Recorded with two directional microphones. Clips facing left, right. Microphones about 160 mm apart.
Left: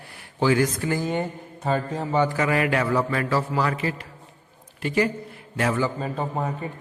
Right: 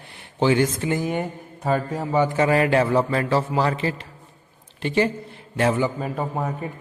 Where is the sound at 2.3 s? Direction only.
30° right (ahead or behind).